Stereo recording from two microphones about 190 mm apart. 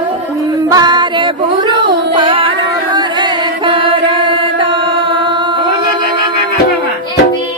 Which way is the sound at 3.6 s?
25° right (ahead or behind).